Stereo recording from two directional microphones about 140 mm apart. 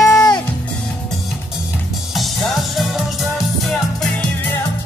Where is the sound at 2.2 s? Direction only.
Centre (ahead or behind).